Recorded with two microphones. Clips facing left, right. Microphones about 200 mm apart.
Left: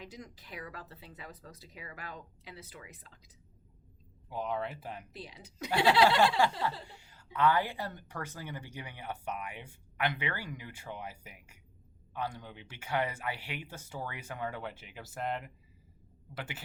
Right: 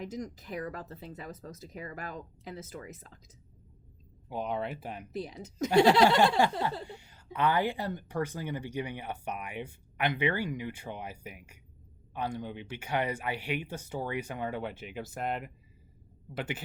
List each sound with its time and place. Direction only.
0.0 s speech: 45° right (ahead or behind)
4.3 s speech: 20° right (ahead or behind)
5.1 s speech: 45° right (ahead or behind)
6.6 s a sound: 20° right (ahead or behind)
7.3 s speech: 20° right (ahead or behind)